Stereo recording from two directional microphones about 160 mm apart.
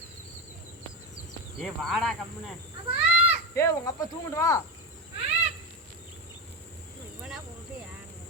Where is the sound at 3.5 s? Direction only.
20° left (ahead or behind).